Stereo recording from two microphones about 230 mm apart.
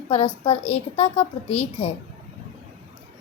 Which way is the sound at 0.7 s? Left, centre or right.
Left.